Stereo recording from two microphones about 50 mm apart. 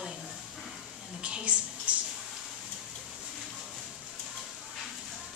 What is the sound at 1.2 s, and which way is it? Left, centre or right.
Speech, right.